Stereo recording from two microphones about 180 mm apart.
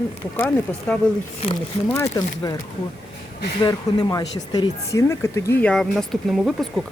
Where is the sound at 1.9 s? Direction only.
20° left (ahead or behind).